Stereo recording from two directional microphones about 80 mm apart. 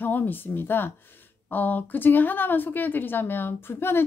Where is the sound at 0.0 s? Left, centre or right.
Left.